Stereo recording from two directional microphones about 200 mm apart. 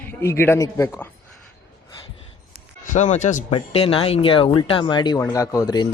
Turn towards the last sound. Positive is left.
turn(degrees=20)  # may be behind; listen again after turning